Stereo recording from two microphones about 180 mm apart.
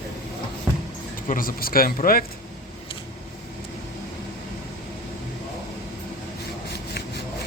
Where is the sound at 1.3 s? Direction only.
50° left (ahead or behind).